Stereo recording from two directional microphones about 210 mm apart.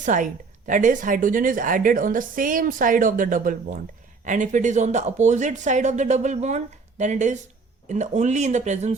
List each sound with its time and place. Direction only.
0.0 s a woman's voice: 35° right (ahead or behind)